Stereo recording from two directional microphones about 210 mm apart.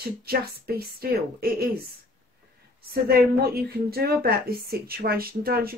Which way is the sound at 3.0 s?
45° right (ahead or behind).